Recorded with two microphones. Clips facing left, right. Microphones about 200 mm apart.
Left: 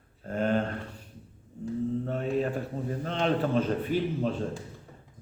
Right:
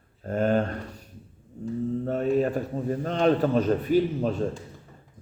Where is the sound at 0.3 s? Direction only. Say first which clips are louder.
Right 4 dB; 45° right (ahead or behind).